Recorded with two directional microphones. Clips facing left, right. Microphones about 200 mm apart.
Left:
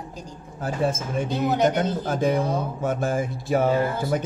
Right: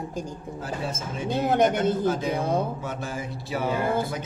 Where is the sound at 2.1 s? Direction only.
50° left (ahead or behind).